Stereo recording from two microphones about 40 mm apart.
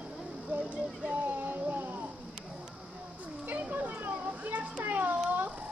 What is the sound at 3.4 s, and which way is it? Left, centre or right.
Children playing, right.